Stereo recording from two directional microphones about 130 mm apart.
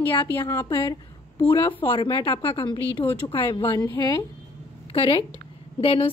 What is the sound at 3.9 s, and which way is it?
Speech, 25° left (ahead or behind).